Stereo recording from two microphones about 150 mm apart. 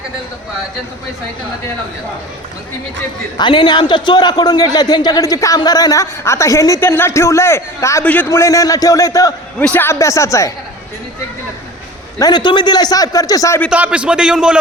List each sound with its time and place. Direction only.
3.3 s a man's voice: 35° left (ahead or behind)
12.2 s a man's voice: 30° left (ahead or behind)
13.7 s a man's voice: 10° right (ahead or behind)